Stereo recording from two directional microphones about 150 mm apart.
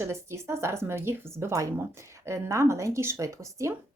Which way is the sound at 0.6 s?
15° right (ahead or behind).